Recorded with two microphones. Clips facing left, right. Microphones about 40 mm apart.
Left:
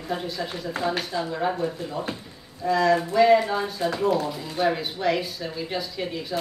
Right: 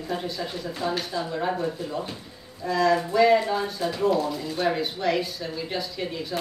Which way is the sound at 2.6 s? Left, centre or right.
Centre.